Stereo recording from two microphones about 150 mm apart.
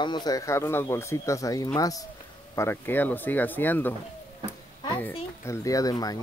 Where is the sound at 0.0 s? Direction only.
30° left (ahead or behind); by 3.9 s 10° left (ahead or behind).